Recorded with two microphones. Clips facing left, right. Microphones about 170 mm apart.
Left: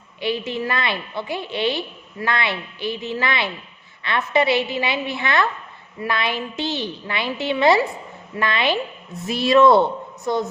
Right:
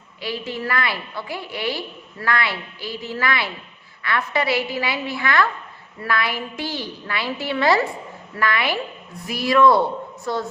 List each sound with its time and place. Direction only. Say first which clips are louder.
0.2 s a woman's voice: left 4 dB; 20° left (ahead or behind)